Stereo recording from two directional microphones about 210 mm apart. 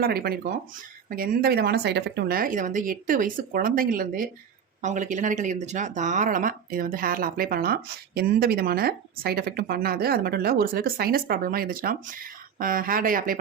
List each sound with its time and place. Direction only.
0.0 s speech: 50° right (ahead or behind)